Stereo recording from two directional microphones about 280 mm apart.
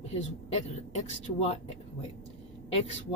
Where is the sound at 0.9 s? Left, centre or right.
Left.